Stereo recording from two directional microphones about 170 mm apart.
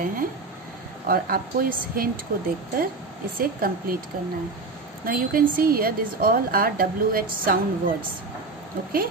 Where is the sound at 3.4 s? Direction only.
60° right (ahead or behind).